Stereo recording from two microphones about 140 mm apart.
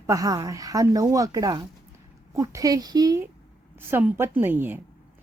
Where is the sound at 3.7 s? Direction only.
15° right (ahead or behind).